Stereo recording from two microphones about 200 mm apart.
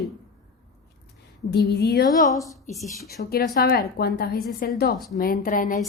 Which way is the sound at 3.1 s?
50° left (ahead or behind).